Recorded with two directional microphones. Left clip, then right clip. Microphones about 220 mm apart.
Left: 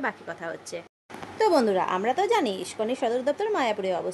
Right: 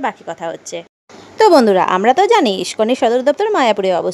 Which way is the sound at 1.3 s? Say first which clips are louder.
Right 12 dB; 40° right (ahead or behind).